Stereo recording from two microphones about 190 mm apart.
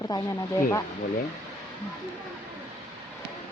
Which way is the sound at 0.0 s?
20° left (ahead or behind).